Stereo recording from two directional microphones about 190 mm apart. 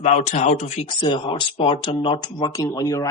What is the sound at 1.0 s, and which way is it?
Speech, 25° left (ahead or behind).